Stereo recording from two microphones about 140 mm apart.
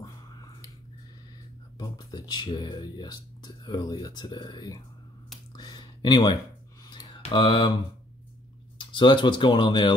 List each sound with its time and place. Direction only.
0.0 s finger snapping: 25° left (ahead or behind)
1.8 s speech: 25° left (ahead or behind)
5.6 s a sound: 30° left (ahead or behind)
7.3 s speech: 35° left (ahead or behind)
8.7 s speech: 35° left (ahead or behind)